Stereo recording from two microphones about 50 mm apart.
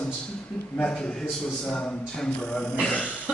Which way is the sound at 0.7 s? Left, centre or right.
Left.